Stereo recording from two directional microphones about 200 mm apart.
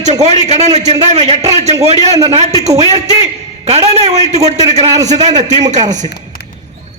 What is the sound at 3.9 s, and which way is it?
Speech, 30° right (ahead or behind).